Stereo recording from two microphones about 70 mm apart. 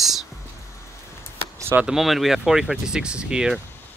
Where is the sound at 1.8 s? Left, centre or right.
Centre.